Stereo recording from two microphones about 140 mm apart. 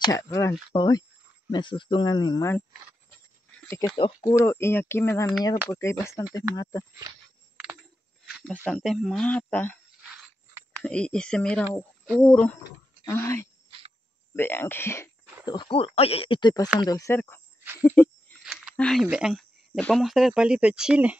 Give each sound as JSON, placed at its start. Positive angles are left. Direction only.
{"t": 0.0, "sound": "speech", "side_deg": 20}
{"t": 3.9, "sound": "speech", "side_deg": 35}
{"t": 4.3, "sound": "speech", "side_deg": 20}
{"t": 8.3, "sound": "a sound", "side_deg": 0}
{"t": 8.6, "sound": "speech", "side_deg": 5}
{"t": 10.8, "sound": "speech", "side_deg": 5}
{"t": 15.4, "sound": "speech", "side_deg": 35}
{"t": 18.4, "sound": "a sound", "side_deg": -5}
{"t": 18.8, "sound": "speech", "side_deg": 5}
{"t": 19.0, "sound": "speech", "side_deg": -5}